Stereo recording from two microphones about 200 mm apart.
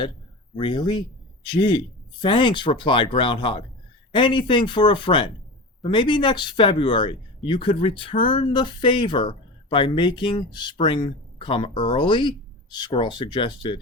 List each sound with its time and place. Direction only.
0.5 s speech: 25° left (ahead or behind)